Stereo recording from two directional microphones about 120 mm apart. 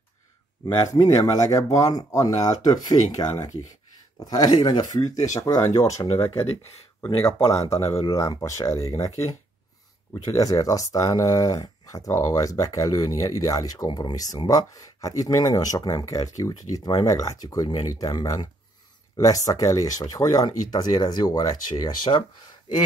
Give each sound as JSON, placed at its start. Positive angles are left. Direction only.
{"t": 0.7, "sound": "speech", "side_deg": 30}